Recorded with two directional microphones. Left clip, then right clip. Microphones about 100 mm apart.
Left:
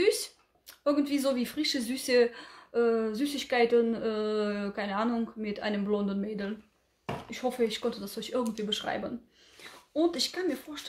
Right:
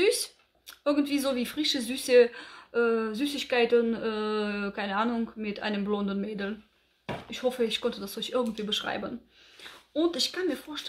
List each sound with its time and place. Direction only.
0.7 s speech: 15° right (ahead or behind)